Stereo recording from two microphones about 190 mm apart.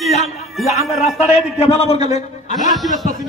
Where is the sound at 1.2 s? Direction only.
35° left (ahead or behind).